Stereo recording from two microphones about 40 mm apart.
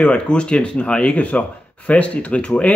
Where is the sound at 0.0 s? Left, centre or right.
Left.